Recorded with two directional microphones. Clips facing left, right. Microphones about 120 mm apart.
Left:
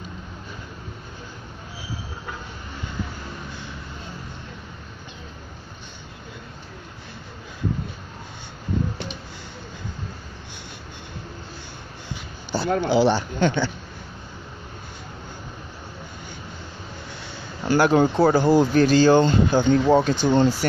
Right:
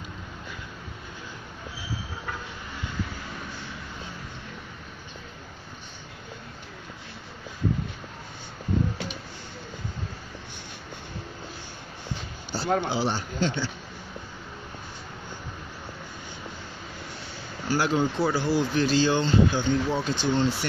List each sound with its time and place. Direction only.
12.5 s speech: 75° left (ahead or behind)
17.6 s speech: 60° left (ahead or behind)